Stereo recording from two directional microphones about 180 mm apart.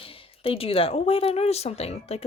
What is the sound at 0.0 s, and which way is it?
A woman's voice, 30° left (ahead or behind).